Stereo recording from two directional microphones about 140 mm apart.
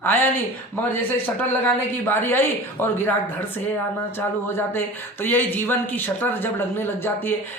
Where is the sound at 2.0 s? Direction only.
15° left (ahead or behind).